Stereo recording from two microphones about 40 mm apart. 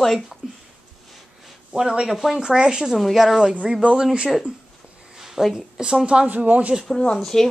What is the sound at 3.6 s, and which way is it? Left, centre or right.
Speech, right.